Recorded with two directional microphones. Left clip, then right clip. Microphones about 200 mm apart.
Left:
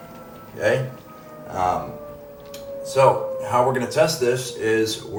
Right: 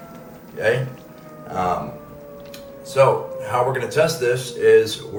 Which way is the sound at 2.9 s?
50° left (ahead or behind).